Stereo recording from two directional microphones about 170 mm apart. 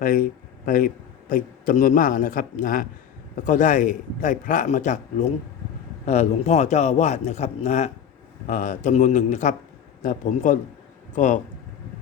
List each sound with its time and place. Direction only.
0.0 s a man's voice: 55° left (ahead or behind)